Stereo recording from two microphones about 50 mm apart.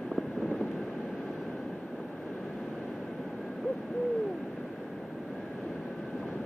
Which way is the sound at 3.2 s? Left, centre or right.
Centre.